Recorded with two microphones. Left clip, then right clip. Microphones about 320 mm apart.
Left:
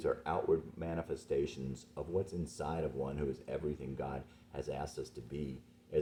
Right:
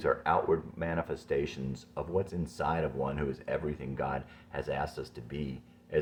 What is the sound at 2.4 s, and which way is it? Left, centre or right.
Speech, centre.